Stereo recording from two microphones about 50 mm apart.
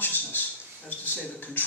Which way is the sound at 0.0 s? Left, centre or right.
Left.